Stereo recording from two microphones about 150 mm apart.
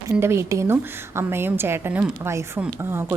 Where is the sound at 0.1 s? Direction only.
15° right (ahead or behind).